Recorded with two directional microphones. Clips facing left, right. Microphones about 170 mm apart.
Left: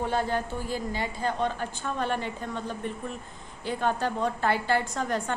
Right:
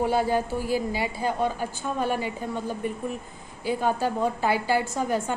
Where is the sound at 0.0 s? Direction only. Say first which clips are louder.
Right 4 dB; 10° right (ahead or behind).